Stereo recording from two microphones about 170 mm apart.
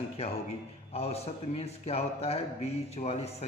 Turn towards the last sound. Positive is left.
turn(degrees=40)  # may be behind; listen again after turning